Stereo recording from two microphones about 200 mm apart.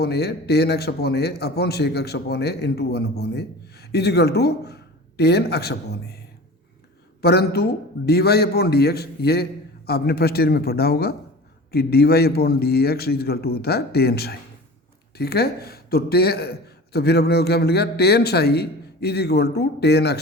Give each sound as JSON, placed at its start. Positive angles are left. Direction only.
{"t": 0.0, "sound": "a man's voice", "side_deg": 55}
{"t": 7.2, "sound": "a man's voice", "side_deg": 55}